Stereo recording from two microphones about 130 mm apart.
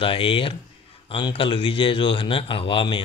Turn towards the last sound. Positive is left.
turn(degrees=40)  # may be behind; listen again after turning